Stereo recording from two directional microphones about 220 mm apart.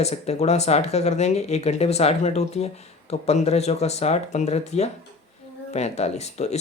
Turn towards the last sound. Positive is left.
turn(degrees=30)  # may be behind; listen again after turning